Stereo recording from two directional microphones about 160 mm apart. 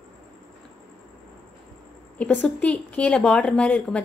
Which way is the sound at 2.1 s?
5° left (ahead or behind).